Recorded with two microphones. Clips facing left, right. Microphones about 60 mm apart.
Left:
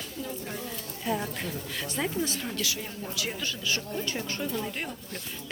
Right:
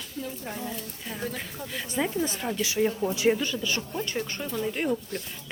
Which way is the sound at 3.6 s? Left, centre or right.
Centre.